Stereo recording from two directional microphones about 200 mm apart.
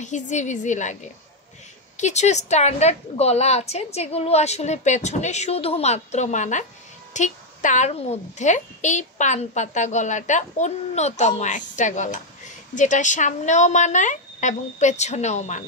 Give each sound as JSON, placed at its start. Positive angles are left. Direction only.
{"t": 0.0, "sound": "a woman's voice", "side_deg": 35}
{"t": 2.0, "sound": "a woman's voice", "side_deg": 35}